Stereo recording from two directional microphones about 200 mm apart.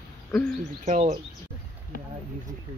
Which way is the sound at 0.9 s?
40° right (ahead or behind).